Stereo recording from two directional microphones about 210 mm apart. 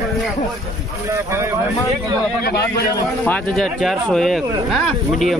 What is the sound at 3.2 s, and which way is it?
Speech, 5° left (ahead or behind).